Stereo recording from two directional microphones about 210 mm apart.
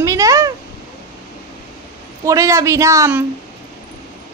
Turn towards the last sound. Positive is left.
turn(degrees=-10)  # may be behind; listen again after turning